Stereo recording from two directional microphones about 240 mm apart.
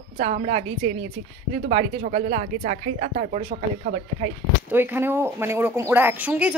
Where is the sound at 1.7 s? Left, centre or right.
Right.